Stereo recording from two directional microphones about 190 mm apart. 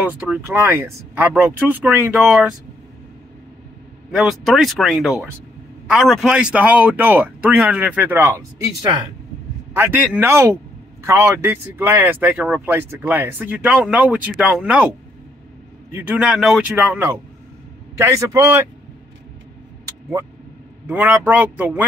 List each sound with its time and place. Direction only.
0.0 s speech: 10° right (ahead or behind)
4.1 s speech: centre (ahead or behind)
9.8 s speech: 10° right (ahead or behind)
15.9 s speech: 10° right (ahead or behind)
20.9 s speech: 10° right (ahead or behind)